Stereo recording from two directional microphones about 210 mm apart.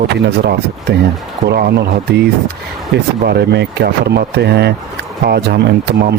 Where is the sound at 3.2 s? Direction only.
50° right (ahead or behind).